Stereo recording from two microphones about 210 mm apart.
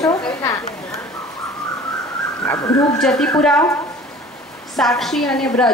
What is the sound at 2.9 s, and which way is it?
Speech, 5° left (ahead or behind).